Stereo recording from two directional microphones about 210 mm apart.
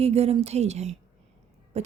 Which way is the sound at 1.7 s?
30° right (ahead or behind).